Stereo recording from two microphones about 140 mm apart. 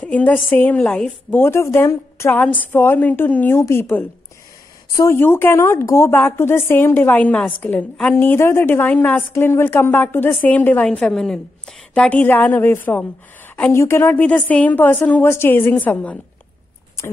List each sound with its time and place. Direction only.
0.0 s a woman's voice: 10° left (ahead or behind)
1.4 s a woman's voice: 20° left (ahead or behind)
17.0 s a sound: 20° left (ahead or behind)